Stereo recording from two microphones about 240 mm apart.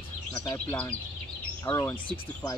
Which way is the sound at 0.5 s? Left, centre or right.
Centre.